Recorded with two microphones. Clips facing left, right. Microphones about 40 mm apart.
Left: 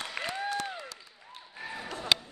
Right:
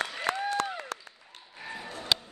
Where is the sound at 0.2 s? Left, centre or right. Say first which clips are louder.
Right 3 dB; left.